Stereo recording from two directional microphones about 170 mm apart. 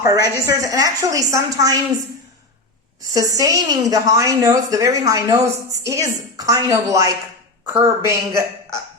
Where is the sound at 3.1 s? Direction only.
20° right (ahead or behind).